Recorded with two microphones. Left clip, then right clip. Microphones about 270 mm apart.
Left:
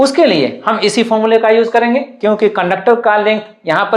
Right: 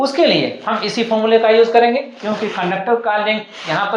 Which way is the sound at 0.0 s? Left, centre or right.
Left.